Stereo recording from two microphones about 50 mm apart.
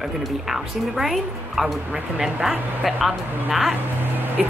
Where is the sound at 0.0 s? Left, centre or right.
Centre.